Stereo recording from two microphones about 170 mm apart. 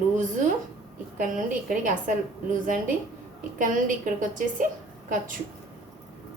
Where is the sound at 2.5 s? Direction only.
50° right (ahead or behind).